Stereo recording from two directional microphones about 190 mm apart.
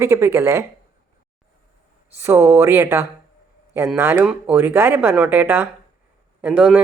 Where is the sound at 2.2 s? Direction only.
15° right (ahead or behind).